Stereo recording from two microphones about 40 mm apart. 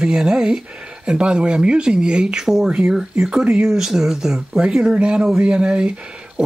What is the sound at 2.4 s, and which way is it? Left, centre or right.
Speech, centre.